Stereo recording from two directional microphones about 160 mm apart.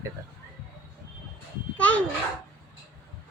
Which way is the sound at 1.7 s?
10° left (ahead or behind).